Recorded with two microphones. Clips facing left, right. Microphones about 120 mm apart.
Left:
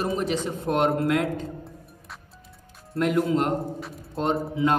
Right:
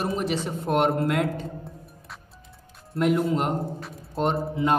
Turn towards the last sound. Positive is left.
turn(degrees=0)  # may be behind; listen again after turning